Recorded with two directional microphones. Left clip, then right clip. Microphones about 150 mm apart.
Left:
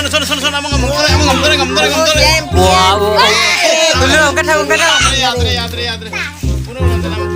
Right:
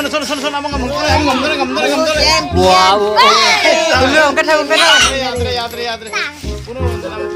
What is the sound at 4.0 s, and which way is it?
Speech, centre (ahead or behind).